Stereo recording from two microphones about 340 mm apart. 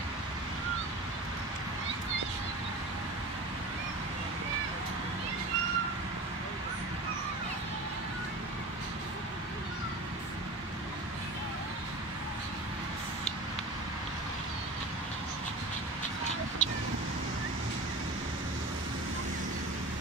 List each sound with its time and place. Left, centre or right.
16.6 s vehicle: left